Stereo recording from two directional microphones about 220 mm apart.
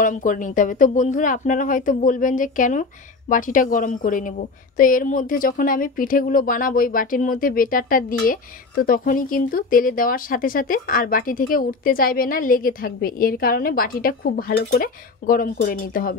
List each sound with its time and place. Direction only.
0.0 s speech: 35° left (ahead or behind)